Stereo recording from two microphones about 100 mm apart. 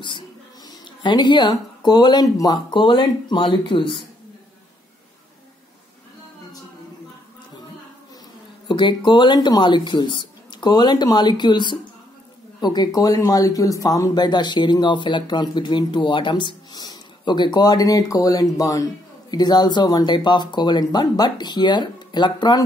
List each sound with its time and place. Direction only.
0.7 s speech: 50° left (ahead or behind)
8.6 s speech: 50° left (ahead or behind)